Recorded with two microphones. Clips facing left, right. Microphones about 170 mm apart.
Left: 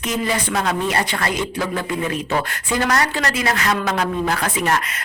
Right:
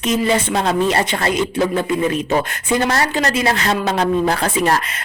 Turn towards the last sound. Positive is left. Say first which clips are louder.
# right 3 dB
turn(degrees=-35)  # may be behind; listen again after turning